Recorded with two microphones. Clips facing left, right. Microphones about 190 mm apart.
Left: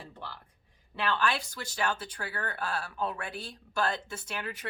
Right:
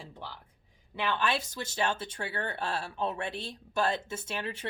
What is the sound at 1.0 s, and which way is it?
Speech, 20° right (ahead or behind).